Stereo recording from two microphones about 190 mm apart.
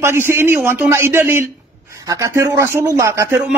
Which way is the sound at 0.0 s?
10° right (ahead or behind).